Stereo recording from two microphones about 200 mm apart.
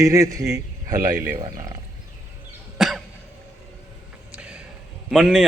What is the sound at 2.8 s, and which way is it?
Cough, centre (ahead or behind).